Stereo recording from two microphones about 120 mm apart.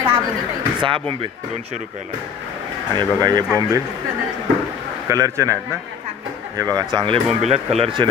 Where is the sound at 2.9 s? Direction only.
35° right (ahead or behind).